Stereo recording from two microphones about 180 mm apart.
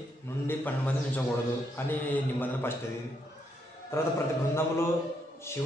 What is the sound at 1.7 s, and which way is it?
Mantra, 10° left (ahead or behind).